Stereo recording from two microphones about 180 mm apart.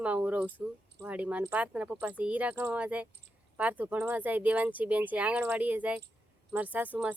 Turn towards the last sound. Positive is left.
turn(degrees=-10)  # may be behind; listen again after turning